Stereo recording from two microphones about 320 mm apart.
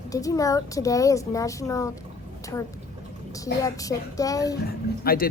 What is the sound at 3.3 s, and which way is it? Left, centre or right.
A child's voice, centre.